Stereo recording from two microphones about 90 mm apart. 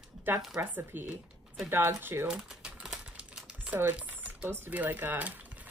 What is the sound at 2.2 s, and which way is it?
Typing, 10° right (ahead or behind).